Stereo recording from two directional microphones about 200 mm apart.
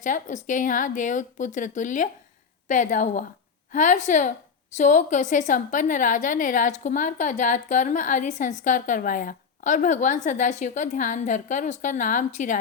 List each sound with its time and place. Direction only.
0.0 s a woman's voice: 40° left (ahead or behind)